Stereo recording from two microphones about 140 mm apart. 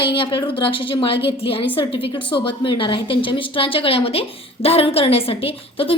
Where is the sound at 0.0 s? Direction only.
35° left (ahead or behind).